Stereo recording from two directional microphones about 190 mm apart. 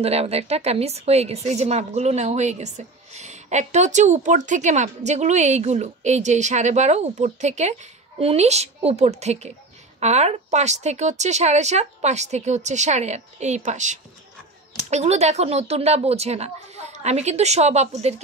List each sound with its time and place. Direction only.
0.0 s a woman's voice: 35° right (ahead or behind)